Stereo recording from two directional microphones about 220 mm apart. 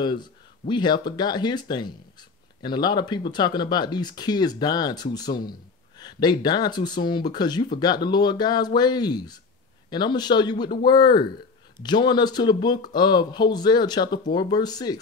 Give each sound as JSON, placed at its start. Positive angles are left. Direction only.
{"t": 0.0, "sound": "speech", "side_deg": 20}